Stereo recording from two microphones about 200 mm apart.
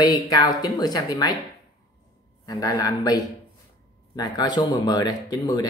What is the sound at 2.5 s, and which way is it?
Speech, 20° left (ahead or behind).